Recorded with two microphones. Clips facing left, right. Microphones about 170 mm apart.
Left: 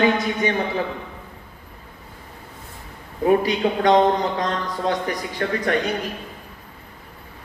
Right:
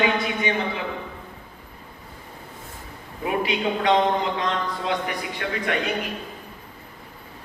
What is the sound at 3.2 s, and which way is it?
A man's voice, 40° left (ahead or behind).